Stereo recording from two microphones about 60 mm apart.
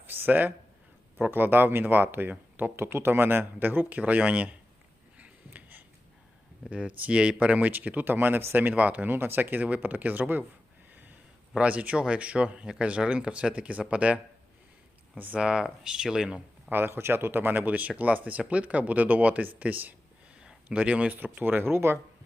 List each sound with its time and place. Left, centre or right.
0.0 s a sound: right
1.2 s speech: right
5.1 s a sound: right
6.7 s speech: right
8.5 s speech: right
11.5 s speech: centre
15.4 s speech: centre
16.6 s speech: right
20.4 s speech: centre
21.4 s speech: right